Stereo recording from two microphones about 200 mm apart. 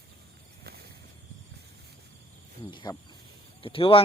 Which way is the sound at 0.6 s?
55° right (ahead or behind).